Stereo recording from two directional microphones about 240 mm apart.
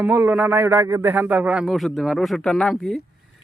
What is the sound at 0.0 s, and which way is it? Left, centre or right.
A man's voice, centre.